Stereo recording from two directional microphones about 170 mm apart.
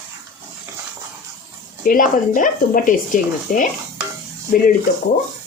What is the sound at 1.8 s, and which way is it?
Speech, 50° left (ahead or behind).